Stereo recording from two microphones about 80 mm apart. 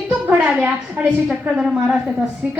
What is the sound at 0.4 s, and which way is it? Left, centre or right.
A woman's voice, centre.